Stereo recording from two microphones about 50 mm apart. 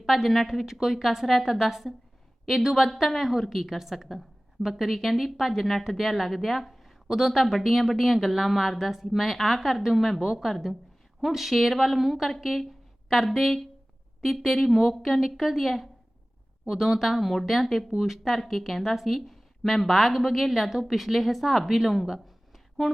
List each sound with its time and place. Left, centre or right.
0.0 s a woman's voice: centre